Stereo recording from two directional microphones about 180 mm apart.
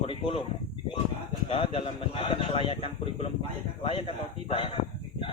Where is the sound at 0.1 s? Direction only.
30° left (ahead or behind).